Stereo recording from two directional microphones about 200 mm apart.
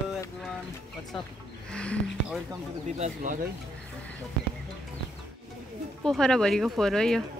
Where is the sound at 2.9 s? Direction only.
35° right (ahead or behind).